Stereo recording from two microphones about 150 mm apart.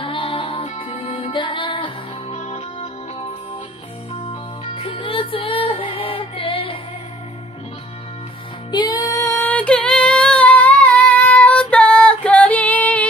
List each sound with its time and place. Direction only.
0.0 s music: 35° left (ahead or behind)
4.2 s music: 35° left (ahead or behind)
8.7 s female singing: 25° left (ahead or behind); by 13.0 s 10° left (ahead or behind)